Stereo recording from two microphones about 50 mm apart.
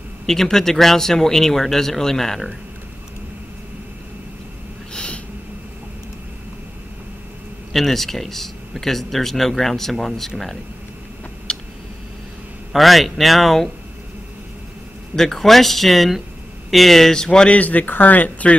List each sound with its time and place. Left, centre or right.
0.3 s speech: centre
4.9 s snort: left
7.7 s speech: centre
11.5 s a sound: centre
12.7 s speech: centre
15.1 s speech: centre
17.5 s speech: left